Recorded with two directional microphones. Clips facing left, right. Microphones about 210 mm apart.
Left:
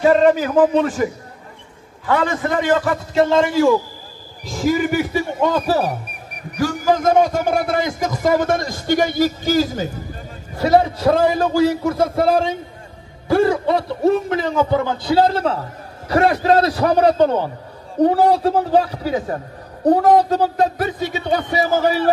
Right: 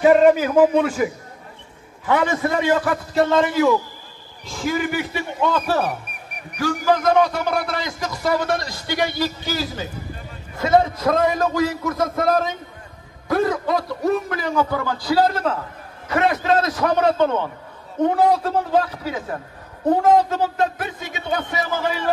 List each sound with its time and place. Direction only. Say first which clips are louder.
0.2 s speech: even; 10° right (ahead or behind)
2.0 s speech: left 1 dB; 15° right (ahead or behind)
3.3 s a man's voice: left 1 dB; 25° left (ahead or behind)
4.5 s a man's voice: left 5 dB; 40° left (ahead or behind)
10.6 s a man's voice: left 2 dB; 35° left (ahead or behind)